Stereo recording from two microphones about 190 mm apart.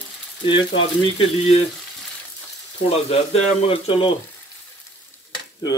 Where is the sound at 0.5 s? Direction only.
25° left (ahead or behind).